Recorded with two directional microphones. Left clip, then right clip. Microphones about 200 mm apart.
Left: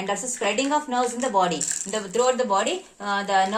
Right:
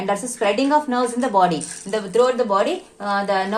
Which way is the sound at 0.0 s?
30° right (ahead or behind).